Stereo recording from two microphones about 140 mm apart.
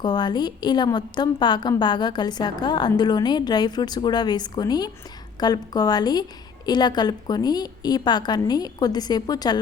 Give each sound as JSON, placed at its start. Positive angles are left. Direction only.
{"t": 0.0, "sound": "a woman's voice", "side_deg": 30}